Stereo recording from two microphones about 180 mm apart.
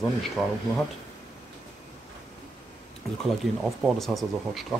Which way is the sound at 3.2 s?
Centre (ahead or behind).